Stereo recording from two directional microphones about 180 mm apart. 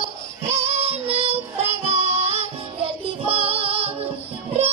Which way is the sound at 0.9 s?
35° right (ahead or behind).